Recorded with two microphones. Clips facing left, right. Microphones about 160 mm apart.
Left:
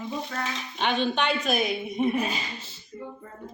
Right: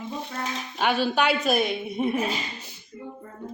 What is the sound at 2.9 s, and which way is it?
Speech, 35° left (ahead or behind).